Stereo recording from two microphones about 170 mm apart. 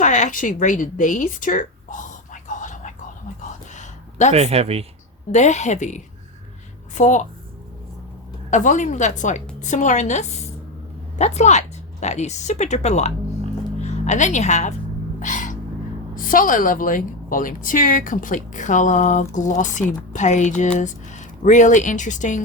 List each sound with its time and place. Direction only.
0.0 s speech: 45° left (ahead or behind)
4.3 s speech: 35° right (ahead or behind)
5.3 s a woman's voice: 45° left (ahead or behind)
8.4 s a woman's voice: 45° left (ahead or behind)
15.2 s gasp: 50° left (ahead or behind)
16.1 s a woman's voice: 55° left (ahead or behind)